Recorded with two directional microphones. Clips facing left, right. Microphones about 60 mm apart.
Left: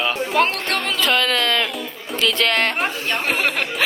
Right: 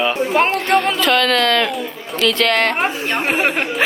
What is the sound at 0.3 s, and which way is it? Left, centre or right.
Speech, right.